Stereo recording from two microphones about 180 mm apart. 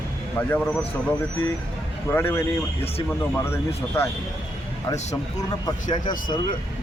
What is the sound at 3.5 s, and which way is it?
Speech, 15° left (ahead or behind).